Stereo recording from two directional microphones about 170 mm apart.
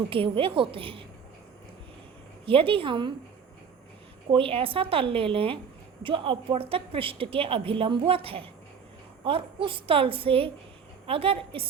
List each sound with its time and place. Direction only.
0.1 s a woman's voice: 30° right (ahead or behind)
2.5 s a woman's voice: 35° right (ahead or behind)
4.3 s a woman's voice: 35° right (ahead or behind)